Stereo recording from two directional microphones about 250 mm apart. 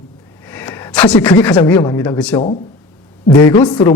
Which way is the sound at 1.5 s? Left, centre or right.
Centre.